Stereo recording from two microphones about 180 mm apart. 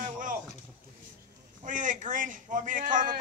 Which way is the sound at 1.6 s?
45° right (ahead or behind).